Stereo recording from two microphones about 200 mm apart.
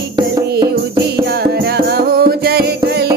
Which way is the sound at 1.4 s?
50° right (ahead or behind).